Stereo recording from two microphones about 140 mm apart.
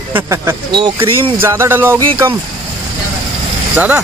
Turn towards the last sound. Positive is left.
turn(degrees=-10)  # may be behind; listen again after turning